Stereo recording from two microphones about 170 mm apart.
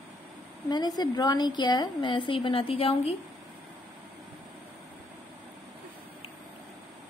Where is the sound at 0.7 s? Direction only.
25° left (ahead or behind).